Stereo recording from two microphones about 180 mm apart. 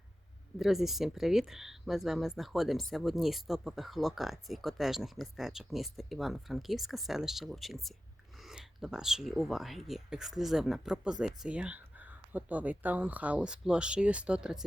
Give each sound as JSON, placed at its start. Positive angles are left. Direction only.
{"t": 0.6, "sound": "speech", "side_deg": 0}